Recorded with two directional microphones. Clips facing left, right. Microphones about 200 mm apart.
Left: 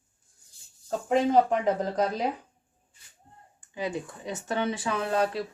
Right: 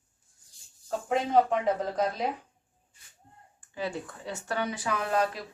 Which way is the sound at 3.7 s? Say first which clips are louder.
Left 2 dB; 15° left (ahead or behind).